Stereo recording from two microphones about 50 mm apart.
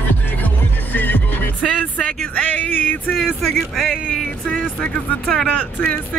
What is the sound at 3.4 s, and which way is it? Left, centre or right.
Speech, centre.